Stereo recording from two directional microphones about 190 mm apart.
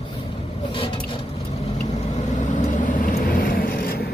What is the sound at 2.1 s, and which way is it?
Vehicle, 40° left (ahead or behind).